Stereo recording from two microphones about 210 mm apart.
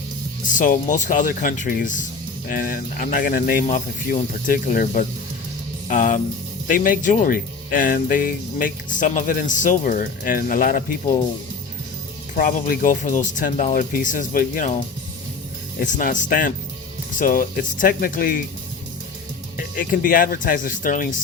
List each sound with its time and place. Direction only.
0.4 s speech: 40° left (ahead or behind)
12.3 s speech: 40° left (ahead or behind)
15.8 s speech: 40° left (ahead or behind)
19.7 s speech: 40° left (ahead or behind)